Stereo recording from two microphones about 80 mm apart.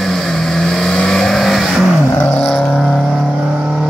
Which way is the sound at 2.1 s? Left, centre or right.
Left.